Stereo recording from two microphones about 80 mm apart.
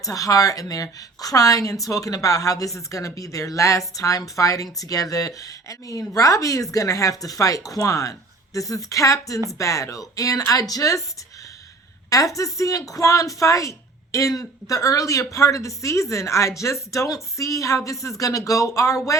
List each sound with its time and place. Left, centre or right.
0.0 s a woman's voice: left
12.1 s a woman's voice: left